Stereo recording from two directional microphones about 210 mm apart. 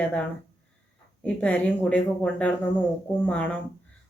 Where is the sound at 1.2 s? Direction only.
5° left (ahead or behind).